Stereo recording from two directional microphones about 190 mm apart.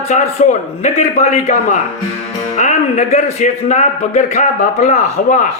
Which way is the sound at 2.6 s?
35° left (ahead or behind).